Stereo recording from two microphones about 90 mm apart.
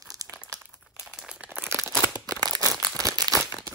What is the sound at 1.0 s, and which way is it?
Crumpling, 5° right (ahead or behind).